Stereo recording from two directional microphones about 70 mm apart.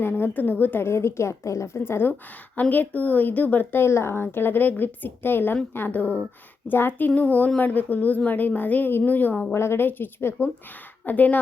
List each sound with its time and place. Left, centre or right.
0.0 s a woman's voice: left
2.6 s speech: left
9.4 s a woman's voice: left